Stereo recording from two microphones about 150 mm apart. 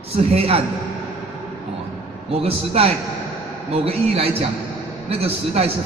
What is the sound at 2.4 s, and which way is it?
A man's voice, 40° right (ahead or behind).